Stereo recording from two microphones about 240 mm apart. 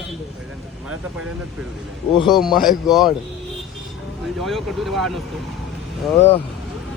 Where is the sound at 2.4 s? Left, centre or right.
Centre.